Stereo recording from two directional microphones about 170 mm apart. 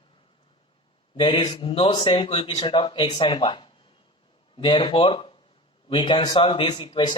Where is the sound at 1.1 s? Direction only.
25° left (ahead or behind).